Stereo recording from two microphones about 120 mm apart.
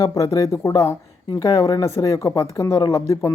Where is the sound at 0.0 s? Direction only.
30° left (ahead or behind).